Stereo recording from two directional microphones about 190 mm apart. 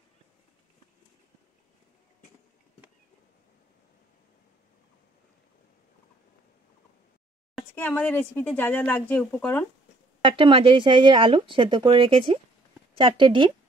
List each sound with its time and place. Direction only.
7.5 s speech: 10° left (ahead or behind)
10.2 s speech: 25° right (ahead or behind)